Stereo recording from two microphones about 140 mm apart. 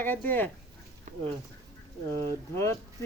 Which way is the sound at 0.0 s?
15° left (ahead or behind).